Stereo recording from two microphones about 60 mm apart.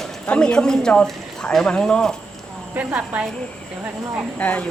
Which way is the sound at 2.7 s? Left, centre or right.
Right.